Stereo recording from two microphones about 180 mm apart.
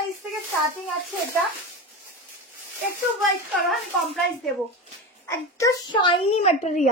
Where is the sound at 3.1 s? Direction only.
Centre (ahead or behind).